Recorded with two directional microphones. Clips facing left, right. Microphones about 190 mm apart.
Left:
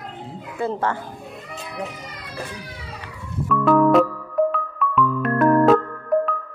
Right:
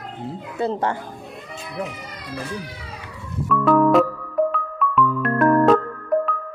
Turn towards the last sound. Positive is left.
turn(degrees=0)  # may be behind; listen again after turning